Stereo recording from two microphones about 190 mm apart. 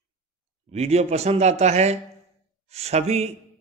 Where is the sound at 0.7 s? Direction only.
35° right (ahead or behind).